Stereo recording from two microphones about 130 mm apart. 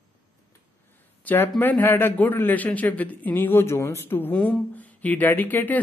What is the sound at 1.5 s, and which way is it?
A man's voice, 15° left (ahead or behind).